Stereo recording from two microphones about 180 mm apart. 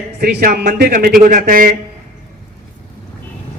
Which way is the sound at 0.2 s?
55° right (ahead or behind).